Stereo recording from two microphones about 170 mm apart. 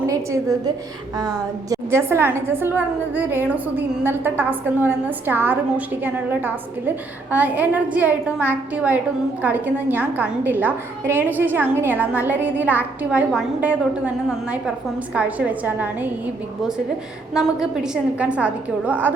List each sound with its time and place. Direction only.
0.0 s a woman's voice: 20° right (ahead or behind)